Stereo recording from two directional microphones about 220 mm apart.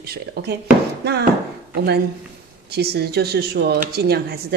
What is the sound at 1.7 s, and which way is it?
Speech, 45° right (ahead or behind).